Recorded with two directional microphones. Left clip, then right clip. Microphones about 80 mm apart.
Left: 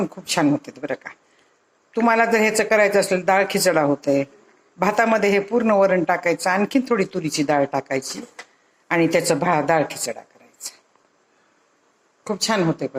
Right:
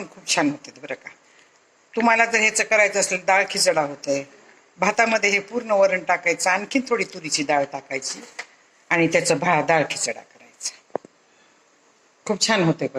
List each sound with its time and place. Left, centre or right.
0.0 s speech: left
4.0 s speech: left
12.2 s speech: left